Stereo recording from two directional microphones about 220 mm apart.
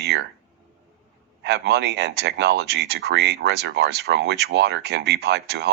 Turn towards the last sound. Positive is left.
turn(degrees=-50)  # may be behind; listen again after turning